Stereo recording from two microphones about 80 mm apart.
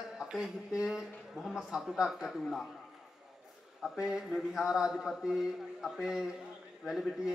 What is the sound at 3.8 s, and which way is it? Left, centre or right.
A man's voice, centre.